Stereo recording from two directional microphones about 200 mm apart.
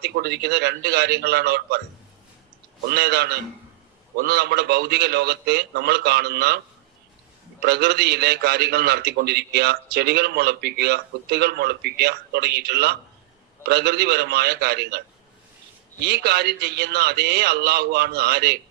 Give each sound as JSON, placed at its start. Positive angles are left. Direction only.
{"t": 0.0, "sound": "a man's voice", "side_deg": -55}
{"t": 2.9, "sound": "a man's voice", "side_deg": -55}
{"t": 7.6, "sound": "a man's voice", "side_deg": -55}